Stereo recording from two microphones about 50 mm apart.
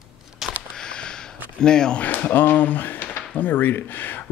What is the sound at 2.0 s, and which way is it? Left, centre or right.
Speech, left.